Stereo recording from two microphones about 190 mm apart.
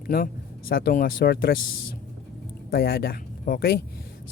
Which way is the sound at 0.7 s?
55° left (ahead or behind).